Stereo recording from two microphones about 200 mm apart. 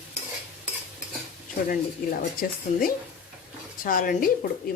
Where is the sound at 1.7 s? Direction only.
45° left (ahead or behind).